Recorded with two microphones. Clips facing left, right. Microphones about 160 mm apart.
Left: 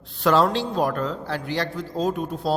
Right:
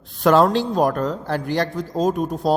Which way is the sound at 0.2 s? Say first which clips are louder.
Right 4 dB; 45° right (ahead or behind).